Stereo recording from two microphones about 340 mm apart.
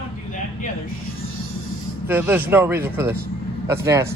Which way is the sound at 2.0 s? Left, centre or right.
Centre.